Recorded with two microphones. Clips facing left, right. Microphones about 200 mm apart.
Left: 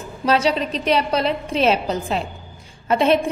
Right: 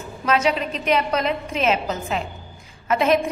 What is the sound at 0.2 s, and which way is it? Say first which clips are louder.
A woman's voice: left 2 dB; 30° left (ahead or behind).